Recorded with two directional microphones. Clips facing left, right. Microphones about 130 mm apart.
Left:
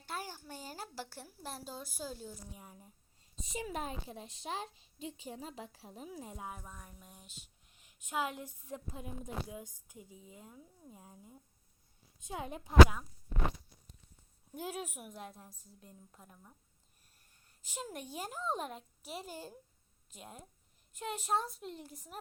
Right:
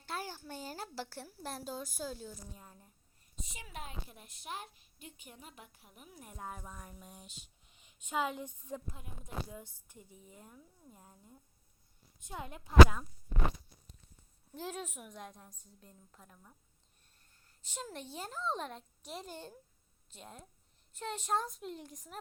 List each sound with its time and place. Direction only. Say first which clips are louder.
0.0 s speech: right 1 dB; 5° left (ahead or behind)
3.5 s speech: left 8 dB; 40° left (ahead or behind)
4.3 s a child's voice: left 3 dB; 90° left
5.8 s speech: left 8 dB; 30° left (ahead or behind)
6.3 s a woman's voice: even; 10° left (ahead or behind)
6.6 s speech: right 2 dB; centre (ahead or behind)
9.0 s a woman's voice: left 3 dB; 20° left (ahead or behind)
12.4 s speech: left 3 dB; 20° left (ahead or behind)
14.5 s a woman's voice: left 1 dB; 10° left (ahead or behind)
15.5 s speech: left 2 dB; 35° left (ahead or behind)
15.8 s a woman's voice: left 2 dB; 5° left (ahead or behind)
17.6 s a woman's voice: left 1 dB; 10° left (ahead or behind)